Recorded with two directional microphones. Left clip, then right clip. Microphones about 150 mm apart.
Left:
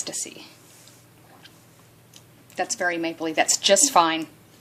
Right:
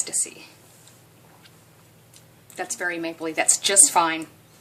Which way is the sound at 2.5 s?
35° left (ahead or behind).